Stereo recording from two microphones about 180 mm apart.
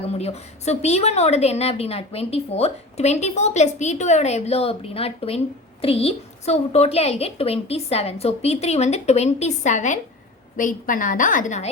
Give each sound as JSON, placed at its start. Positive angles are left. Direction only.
{"t": 0.1, "sound": "a woman's voice", "side_deg": 35}